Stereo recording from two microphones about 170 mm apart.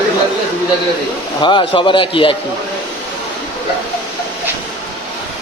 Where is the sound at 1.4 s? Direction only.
30° left (ahead or behind).